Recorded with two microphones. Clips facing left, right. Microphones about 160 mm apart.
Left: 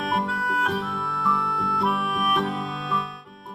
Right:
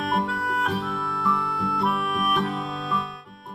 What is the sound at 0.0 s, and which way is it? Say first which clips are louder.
Harmonica: even; centre (ahead or behind).